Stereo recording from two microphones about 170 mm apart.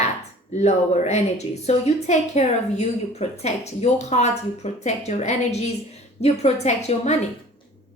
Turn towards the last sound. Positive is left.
turn(degrees=40)  # may be behind; listen again after turning